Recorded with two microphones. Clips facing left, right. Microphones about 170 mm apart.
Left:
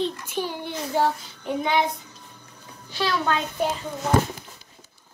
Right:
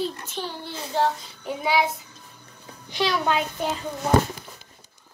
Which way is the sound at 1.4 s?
5° right (ahead or behind).